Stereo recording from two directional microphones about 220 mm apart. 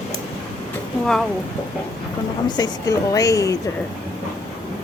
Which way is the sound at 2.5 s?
20° left (ahead or behind).